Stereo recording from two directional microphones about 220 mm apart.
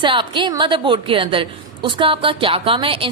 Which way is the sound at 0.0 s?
20° right (ahead or behind).